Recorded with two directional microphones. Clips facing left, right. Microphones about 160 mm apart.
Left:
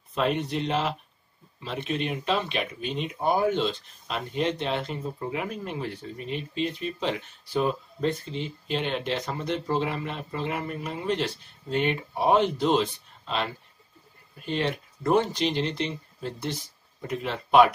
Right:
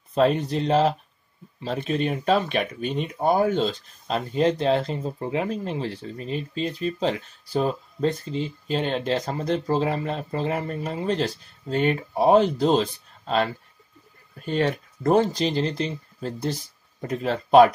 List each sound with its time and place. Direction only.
0.1 s speech: 35° right (ahead or behind)